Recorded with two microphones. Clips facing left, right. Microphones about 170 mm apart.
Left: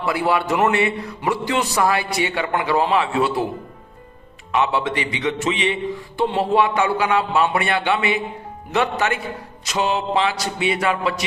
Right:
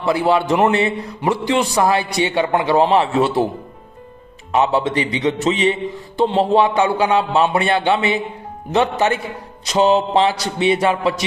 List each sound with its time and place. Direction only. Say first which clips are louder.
0.0 s speech: right 4 dB; 20° right (ahead or behind); by 3.5 s 35° right (ahead or behind)
4.5 s a man's voice: right 4 dB; 35° right (ahead or behind)
6.1 s a man's voice: right 4 dB; 20° right (ahead or behind)